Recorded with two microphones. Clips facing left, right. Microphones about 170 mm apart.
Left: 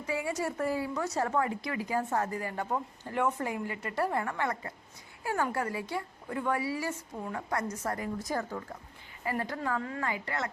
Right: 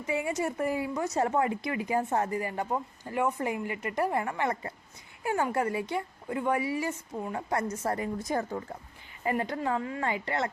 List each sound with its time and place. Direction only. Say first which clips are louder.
0.1 s a woman's voice: right 2 dB; 20° right (ahead or behind)